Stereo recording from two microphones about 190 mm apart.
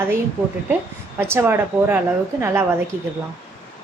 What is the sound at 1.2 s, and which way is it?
A woman's voice, 10° right (ahead or behind).